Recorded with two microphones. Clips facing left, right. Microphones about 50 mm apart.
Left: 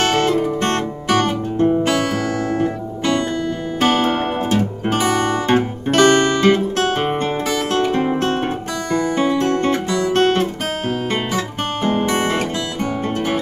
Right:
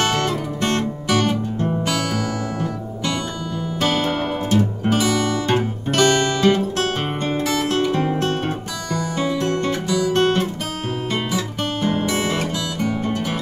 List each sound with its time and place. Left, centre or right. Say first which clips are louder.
0.0 s music: left 4 dB; left
3.8 s music: left 4 dB; left
4.8 s guitar: left 2 dB; left
7.7 s music: left 2 dB; left
11.3 s guitar: left 2 dB; left